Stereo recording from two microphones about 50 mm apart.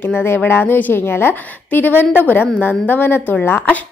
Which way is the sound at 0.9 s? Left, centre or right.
Left.